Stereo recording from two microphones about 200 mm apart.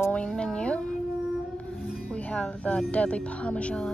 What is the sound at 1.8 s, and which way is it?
Music, 5° right (ahead or behind).